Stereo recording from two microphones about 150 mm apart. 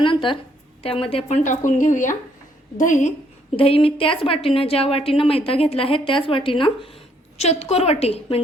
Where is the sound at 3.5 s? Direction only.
40° left (ahead or behind).